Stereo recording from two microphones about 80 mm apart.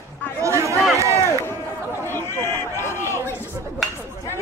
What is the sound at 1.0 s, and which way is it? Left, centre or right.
Run, right.